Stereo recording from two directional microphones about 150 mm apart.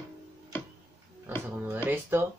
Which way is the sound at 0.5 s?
15° left (ahead or behind).